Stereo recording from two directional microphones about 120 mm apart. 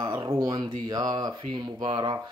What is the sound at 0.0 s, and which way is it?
Speech, 35° right (ahead or behind).